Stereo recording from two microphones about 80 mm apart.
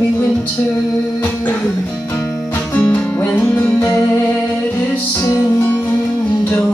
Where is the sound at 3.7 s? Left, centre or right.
Left.